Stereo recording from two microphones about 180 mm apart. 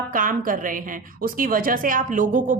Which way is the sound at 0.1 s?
50° right (ahead or behind).